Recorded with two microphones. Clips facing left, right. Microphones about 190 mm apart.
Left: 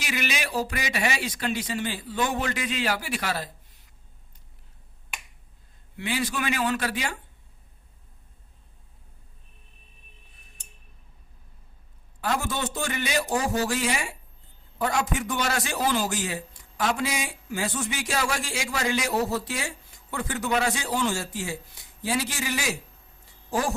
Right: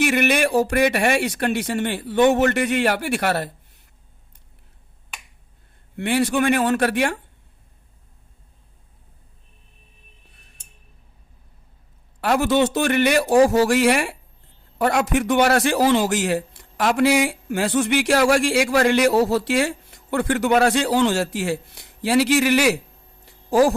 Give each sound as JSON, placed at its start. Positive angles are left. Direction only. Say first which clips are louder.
{"t": 0.0, "sound": "speech", "louder": "right 12 dB", "side_deg": -60}
{"t": 6.0, "sound": "speech", "louder": "right 9 dB", "side_deg": -65}
{"t": 6.4, "sound": "speech", "louder": "right 8 dB", "side_deg": -50}
{"t": 12.2, "sound": "a man's voice", "louder": "right 10 dB", "side_deg": -80}
{"t": 23.2, "sound": "a sound", "louder": "right 11 dB", "side_deg": -90}